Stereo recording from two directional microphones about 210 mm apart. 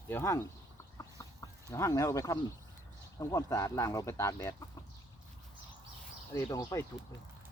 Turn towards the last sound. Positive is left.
turn(degrees=15)  # may be behind; listen again after turning